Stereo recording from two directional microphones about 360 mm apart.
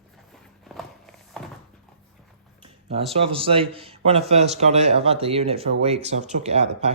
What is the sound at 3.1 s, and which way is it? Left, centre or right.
Speech, centre.